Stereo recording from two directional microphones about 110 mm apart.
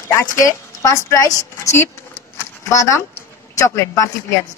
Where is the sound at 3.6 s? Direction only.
30° left (ahead or behind).